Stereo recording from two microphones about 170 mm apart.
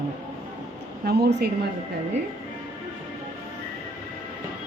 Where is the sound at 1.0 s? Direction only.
70° right (ahead or behind).